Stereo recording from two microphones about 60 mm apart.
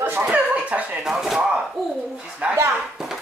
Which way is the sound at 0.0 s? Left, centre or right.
Right.